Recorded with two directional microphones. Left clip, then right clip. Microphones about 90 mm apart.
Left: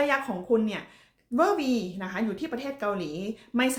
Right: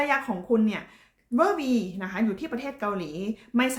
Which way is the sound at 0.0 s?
25° right (ahead or behind).